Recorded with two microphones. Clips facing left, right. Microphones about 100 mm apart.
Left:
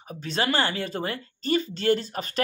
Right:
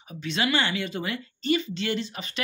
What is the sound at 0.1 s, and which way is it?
A woman's voice, 40° left (ahead or behind).